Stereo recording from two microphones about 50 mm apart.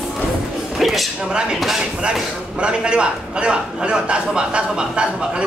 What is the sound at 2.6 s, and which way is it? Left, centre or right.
A man's voice, centre.